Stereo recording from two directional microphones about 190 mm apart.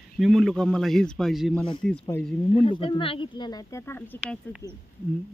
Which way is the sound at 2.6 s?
25° left (ahead or behind).